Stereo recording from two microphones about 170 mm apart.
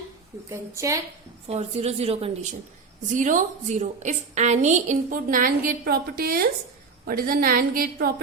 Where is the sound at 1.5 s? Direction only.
40° right (ahead or behind).